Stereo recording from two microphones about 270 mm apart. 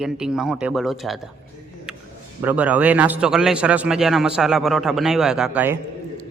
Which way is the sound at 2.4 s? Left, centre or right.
Centre.